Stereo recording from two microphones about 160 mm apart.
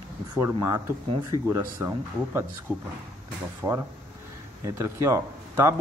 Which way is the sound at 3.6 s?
15° right (ahead or behind).